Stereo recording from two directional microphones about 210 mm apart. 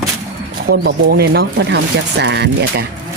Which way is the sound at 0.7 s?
50° right (ahead or behind).